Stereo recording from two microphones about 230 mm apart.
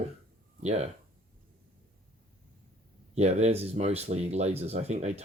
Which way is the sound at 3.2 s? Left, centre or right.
Right.